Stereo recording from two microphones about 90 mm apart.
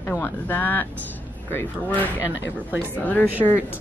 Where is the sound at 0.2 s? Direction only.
20° left (ahead or behind).